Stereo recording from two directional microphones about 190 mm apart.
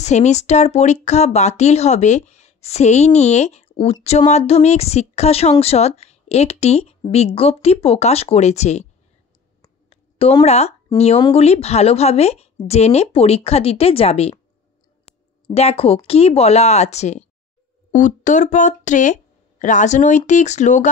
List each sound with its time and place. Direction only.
0.0 s a woman's voice: 35° left (ahead or behind)
10.4 s a woman's voice: 35° left (ahead or behind)